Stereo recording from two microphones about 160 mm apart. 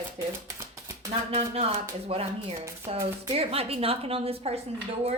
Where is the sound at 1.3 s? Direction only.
40° right (ahead or behind).